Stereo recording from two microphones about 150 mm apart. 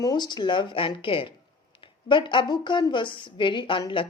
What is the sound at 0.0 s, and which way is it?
Speech, 30° left (ahead or behind).